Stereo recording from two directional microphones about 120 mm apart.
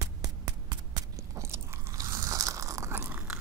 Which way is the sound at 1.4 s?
25° right (ahead or behind).